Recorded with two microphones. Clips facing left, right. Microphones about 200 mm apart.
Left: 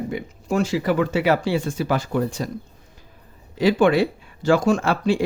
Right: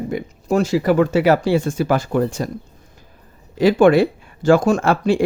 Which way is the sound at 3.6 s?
50° right (ahead or behind).